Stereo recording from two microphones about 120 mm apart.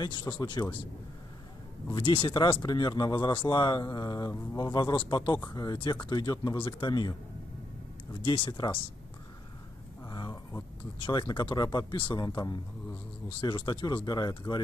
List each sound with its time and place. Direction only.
0.0 s speech: 40° left (ahead or behind)
1.9 s speech: 45° left (ahead or behind)
10.0 s a sound: 35° left (ahead or behind)
11.0 s speech: 40° left (ahead or behind)